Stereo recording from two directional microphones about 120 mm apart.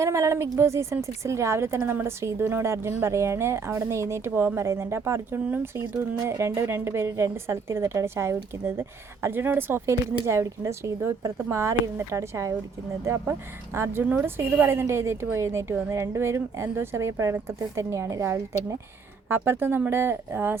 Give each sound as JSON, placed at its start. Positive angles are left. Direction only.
{"t": 0.0, "sound": "a woman's voice", "side_deg": -25}